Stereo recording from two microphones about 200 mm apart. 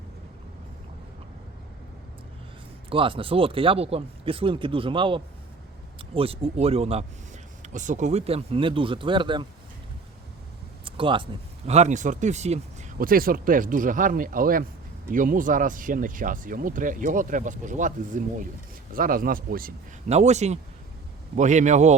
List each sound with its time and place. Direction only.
2.9 s speech: 25° right (ahead or behind)
10.8 s speech: 25° right (ahead or behind); by 19.7 s 45° right (ahead or behind)
20.1 s speech: 35° right (ahead or behind)